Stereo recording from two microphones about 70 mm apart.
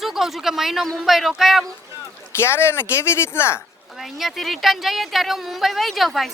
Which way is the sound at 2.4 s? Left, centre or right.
Left.